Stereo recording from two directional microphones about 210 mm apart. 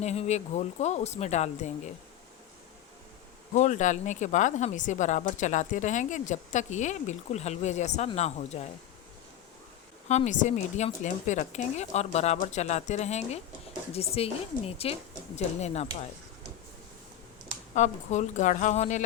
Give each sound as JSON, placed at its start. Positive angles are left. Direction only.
{"t": 0.0, "sound": "speech", "side_deg": 30}
{"t": 3.5, "sound": "speech", "side_deg": 35}
{"t": 10.1, "sound": "speech", "side_deg": 35}
{"t": 17.7, "sound": "speech", "side_deg": 35}